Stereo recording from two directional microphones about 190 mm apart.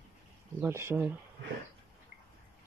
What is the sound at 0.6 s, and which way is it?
Speech, 15° right (ahead or behind).